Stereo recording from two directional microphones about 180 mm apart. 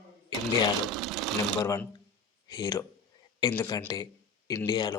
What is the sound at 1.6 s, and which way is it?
Speech, 20° left (ahead or behind).